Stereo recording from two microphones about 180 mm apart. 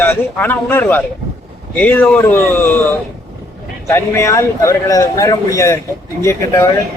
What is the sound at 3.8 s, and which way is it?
Speech, 15° left (ahead or behind).